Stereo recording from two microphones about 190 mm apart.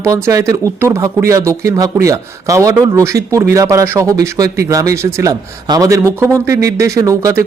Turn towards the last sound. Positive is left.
turn(degrees=-15)  # may be behind; listen again after turning